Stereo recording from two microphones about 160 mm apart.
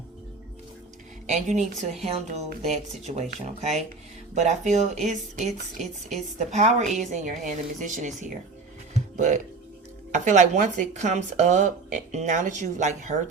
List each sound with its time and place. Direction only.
1.3 s speech: 45° right (ahead or behind)
8.9 s music: 50° right (ahead or behind)
10.3 s speech: 50° right (ahead or behind)